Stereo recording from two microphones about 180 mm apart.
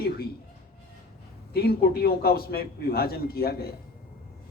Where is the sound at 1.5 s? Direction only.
60° left (ahead or behind).